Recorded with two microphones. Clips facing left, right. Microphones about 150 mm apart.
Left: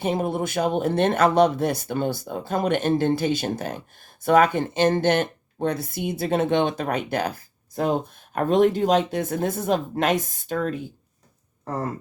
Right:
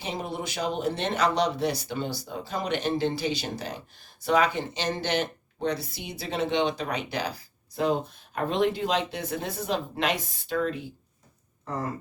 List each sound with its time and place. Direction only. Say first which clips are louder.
0.0 s speech: left 8 dB; 50° left (ahead or behind)